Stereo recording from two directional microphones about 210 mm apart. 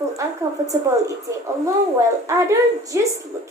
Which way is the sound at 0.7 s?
15° right (ahead or behind).